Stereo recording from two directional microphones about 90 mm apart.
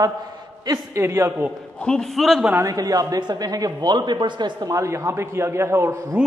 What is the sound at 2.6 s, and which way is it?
A man's voice, 40° right (ahead or behind).